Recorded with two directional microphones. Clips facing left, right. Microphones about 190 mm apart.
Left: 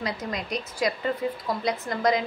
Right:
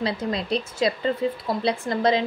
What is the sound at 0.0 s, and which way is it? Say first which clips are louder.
A woman's voice: right 5 dB; 30° right (ahead or behind).